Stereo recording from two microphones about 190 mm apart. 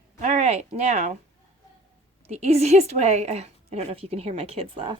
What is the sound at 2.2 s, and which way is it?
A woman's voice, 35° right (ahead or behind).